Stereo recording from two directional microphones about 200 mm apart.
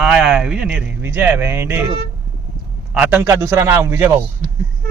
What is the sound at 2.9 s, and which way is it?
Speech, 5° right (ahead or behind).